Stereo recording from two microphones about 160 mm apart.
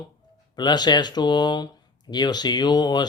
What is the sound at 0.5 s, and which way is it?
Speech, 25° left (ahead or behind).